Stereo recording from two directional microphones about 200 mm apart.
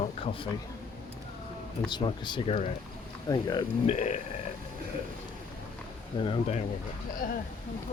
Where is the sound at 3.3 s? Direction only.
20° left (ahead or behind).